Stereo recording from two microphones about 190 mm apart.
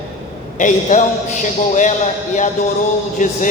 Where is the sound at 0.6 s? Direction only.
40° left (ahead or behind).